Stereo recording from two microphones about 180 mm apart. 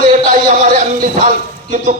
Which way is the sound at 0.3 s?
50° right (ahead or behind).